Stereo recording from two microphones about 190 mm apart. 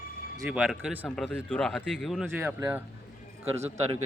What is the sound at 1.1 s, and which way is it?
Speech, 5° left (ahead or behind).